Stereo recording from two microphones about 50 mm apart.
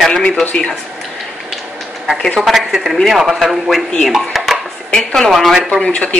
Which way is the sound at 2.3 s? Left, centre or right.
Centre.